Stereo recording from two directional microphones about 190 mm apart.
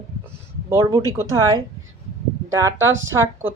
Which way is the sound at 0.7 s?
15° right (ahead or behind).